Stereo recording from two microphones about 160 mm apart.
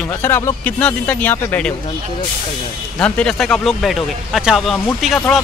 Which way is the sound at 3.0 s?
5° left (ahead or behind).